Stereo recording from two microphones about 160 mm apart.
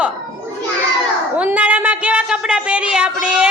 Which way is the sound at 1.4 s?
10° right (ahead or behind).